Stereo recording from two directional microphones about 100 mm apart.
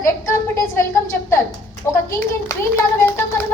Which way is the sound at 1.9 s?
25° left (ahead or behind).